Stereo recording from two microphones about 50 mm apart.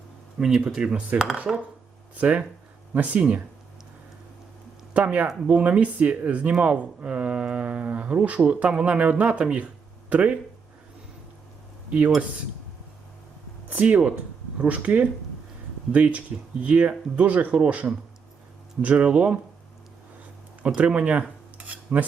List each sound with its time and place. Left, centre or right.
0.3 s speech: centre
1.5 s speech: centre
2.1 s speech: right
4.9 s speech: right
11.9 s speech: right
13.7 s speech: right
20.6 s cutlery: right